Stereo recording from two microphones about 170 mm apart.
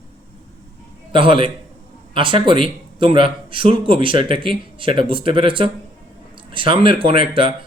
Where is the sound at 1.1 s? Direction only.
30° right (ahead or behind).